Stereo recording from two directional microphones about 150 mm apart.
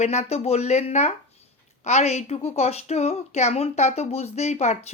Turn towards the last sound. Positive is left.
turn(degrees=50)  # may be behind; listen again after turning